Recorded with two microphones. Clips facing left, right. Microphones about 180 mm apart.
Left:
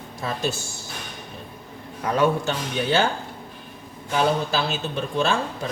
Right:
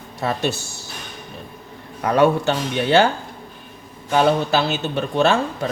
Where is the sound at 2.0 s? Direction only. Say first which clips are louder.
Right 5 dB; 70° right (ahead or behind).